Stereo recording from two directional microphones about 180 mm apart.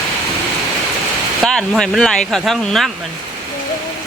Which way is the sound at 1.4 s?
5° left (ahead or behind).